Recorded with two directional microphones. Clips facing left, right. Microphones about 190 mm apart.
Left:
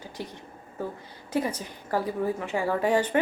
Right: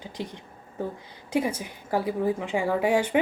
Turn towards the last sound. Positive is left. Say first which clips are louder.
# right 1 dB
turn(degrees=-10)  # may be behind; listen again after turning